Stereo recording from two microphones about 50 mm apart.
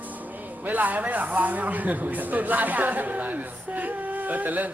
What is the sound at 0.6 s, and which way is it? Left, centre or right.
Speech, right.